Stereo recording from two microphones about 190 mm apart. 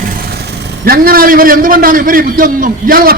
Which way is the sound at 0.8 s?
50° right (ahead or behind).